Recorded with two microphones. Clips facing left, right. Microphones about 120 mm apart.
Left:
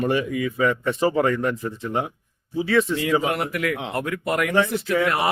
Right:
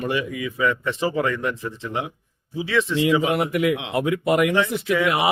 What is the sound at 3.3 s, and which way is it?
Speech, 10° right (ahead or behind).